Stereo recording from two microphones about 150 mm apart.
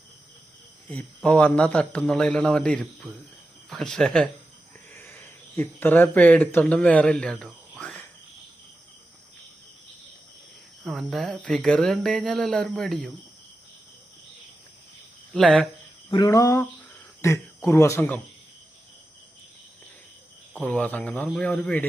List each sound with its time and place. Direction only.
0.9 s a man's voice: 10° left (ahead or behind)
4.9 s speech: 15° left (ahead or behind)
7.8 s a sound: 5° left (ahead or behind)
10.8 s speech: centre (ahead or behind)
15.3 s speech: 5° left (ahead or behind)
16.0 s cricket: 25° left (ahead or behind)
17.2 s speech: 15° left (ahead or behind)
20.5 s a man's voice: 10° left (ahead or behind)